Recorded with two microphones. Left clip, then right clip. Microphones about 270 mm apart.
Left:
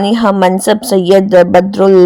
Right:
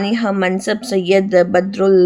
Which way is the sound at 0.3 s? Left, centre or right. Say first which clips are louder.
Left 9 dB; centre.